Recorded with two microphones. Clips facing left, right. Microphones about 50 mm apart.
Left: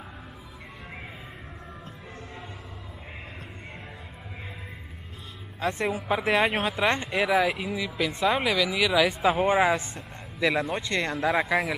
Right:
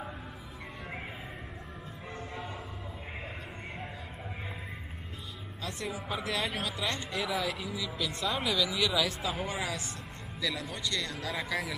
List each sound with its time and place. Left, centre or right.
5.6 s speech: left
8.5 s speech: centre
9.0 s speech: left